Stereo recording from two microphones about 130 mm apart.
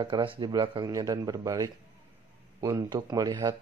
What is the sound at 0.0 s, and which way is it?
A man's voice, 40° right (ahead or behind).